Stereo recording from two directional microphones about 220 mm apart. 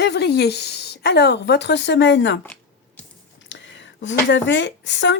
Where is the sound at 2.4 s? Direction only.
5° left (ahead or behind).